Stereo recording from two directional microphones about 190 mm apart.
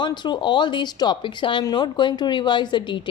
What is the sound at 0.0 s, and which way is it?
Speech, 25° left (ahead or behind).